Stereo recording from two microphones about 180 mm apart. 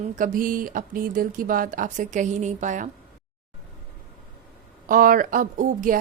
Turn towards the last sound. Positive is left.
turn(degrees=-50)  # may be behind; listen again after turning